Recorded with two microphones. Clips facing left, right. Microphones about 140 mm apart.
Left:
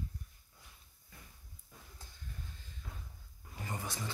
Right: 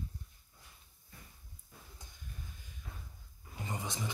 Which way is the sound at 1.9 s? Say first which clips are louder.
Left 1 dB; 15° right (ahead or behind).